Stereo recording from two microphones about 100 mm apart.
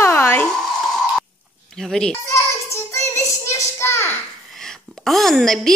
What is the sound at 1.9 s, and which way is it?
Speech, 5° left (ahead or behind).